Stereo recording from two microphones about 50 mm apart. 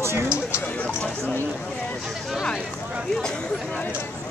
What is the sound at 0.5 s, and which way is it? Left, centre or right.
Speech, left.